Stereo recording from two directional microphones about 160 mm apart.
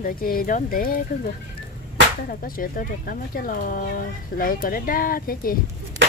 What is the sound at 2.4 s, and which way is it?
Speech, 60° left (ahead or behind).